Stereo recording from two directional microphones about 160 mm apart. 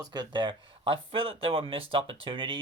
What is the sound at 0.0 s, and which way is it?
Speech, 25° right (ahead or behind).